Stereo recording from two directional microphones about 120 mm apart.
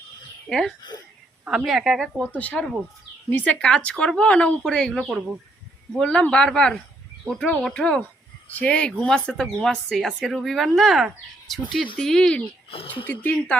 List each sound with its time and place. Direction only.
0.8 s speech: 35° left (ahead or behind)
1.5 s speech: 5° right (ahead or behind)
2.3 s speech: 10° left (ahead or behind)
12.6 s speech: 50° left (ahead or behind)
13.1 s speech: 15° left (ahead or behind)